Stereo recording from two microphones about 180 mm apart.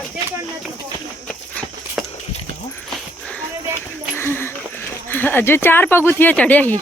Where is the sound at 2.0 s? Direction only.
Centre (ahead or behind).